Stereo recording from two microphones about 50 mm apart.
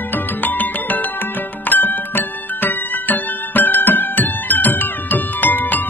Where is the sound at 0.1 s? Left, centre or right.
Left.